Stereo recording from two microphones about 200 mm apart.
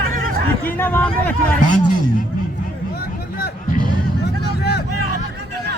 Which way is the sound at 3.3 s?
50° left (ahead or behind).